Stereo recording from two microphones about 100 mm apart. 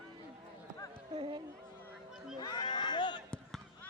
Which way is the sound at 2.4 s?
45° left (ahead or behind).